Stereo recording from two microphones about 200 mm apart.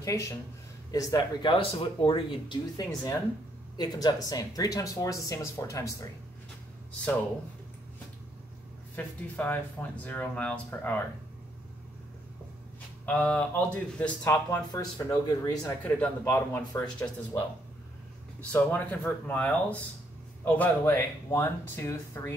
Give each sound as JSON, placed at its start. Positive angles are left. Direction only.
{"t": 0.0, "sound": "speech", "side_deg": 15}
{"t": 8.9, "sound": "speech", "side_deg": 10}
{"t": 13.0, "sound": "speech", "side_deg": 5}
{"t": 18.4, "sound": "speech", "side_deg": 5}